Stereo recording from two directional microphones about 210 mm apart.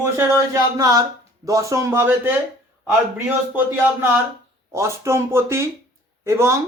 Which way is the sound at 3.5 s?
10° right (ahead or behind).